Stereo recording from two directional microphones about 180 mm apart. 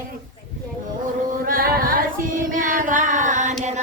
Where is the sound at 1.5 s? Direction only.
55° right (ahead or behind).